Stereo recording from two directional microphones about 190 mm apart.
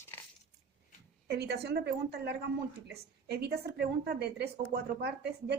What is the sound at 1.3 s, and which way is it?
A woman's voice, 60° right (ahead or behind).